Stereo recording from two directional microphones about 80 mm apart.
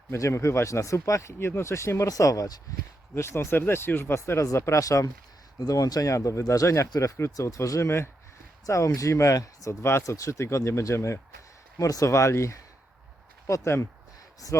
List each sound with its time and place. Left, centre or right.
0.1 s speech: left
3.2 s speech: left
8.6 s speech: left